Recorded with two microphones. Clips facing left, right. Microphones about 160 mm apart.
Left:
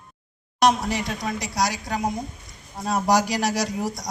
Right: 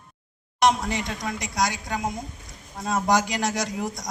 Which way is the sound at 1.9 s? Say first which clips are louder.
Left 3 dB; 20° left (ahead or behind).